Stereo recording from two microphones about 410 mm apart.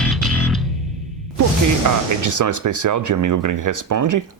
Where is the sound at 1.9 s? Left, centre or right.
Right.